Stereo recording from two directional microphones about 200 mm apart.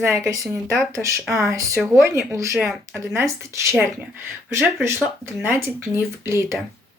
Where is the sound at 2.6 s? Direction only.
5° right (ahead or behind).